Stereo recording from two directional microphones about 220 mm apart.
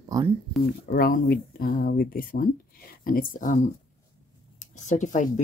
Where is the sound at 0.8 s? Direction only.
40° left (ahead or behind).